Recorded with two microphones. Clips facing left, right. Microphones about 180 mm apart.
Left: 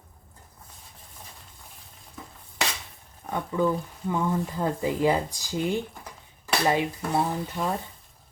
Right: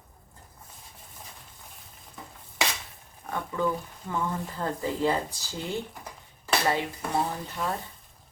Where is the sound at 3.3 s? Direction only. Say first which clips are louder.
Left 3 dB; 15° left (ahead or behind).